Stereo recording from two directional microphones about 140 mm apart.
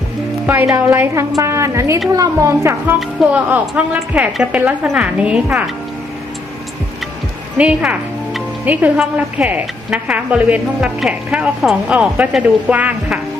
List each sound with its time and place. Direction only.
0.4 s a woman's voice: 15° right (ahead or behind)
3.0 s speech: 5° right (ahead or behind)
7.6 s speech: 10° right (ahead or behind)